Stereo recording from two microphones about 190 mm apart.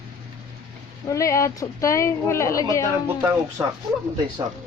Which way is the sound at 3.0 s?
10° right (ahead or behind).